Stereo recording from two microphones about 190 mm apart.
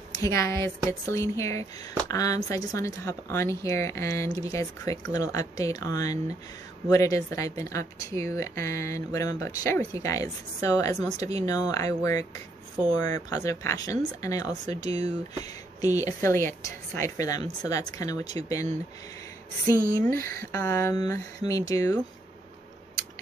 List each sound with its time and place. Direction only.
0.2 s a woman's voice: 15° left (ahead or behind)
20.1 s a woman's voice: 15° left (ahead or behind)